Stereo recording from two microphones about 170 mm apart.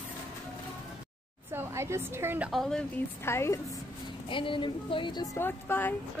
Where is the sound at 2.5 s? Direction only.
Centre (ahead or behind).